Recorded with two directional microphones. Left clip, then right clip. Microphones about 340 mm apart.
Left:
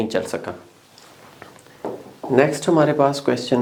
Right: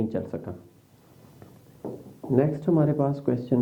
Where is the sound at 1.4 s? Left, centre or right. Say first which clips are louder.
Left 8 dB; centre.